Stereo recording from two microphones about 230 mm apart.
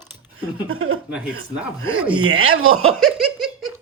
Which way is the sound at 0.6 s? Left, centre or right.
Right.